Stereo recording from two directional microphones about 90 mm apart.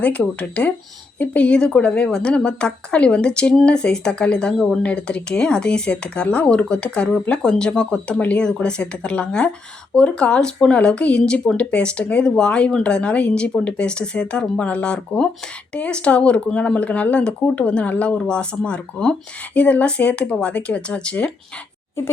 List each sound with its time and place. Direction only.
0.0 s speech: 15° left (ahead or behind)